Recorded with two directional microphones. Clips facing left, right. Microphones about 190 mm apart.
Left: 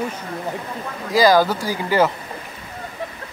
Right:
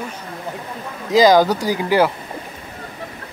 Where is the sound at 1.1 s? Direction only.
20° right (ahead or behind).